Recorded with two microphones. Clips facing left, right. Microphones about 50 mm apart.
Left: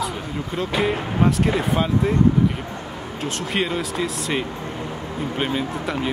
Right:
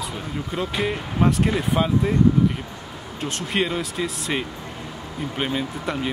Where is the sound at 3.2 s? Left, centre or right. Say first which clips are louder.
Even; centre.